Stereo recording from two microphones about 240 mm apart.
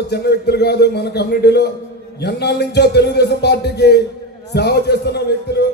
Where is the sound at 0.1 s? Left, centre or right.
Left.